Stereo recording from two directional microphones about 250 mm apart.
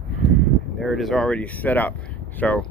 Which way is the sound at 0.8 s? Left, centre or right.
Centre.